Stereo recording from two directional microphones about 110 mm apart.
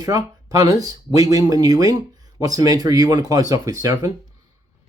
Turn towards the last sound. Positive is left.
turn(degrees=-30)  # may be behind; listen again after turning